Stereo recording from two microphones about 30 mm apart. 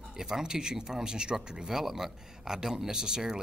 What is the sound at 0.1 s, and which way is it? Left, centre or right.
Speech, centre.